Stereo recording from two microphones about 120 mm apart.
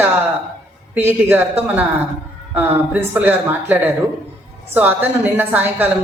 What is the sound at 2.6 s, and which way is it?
A man's voice, 15° right (ahead or behind).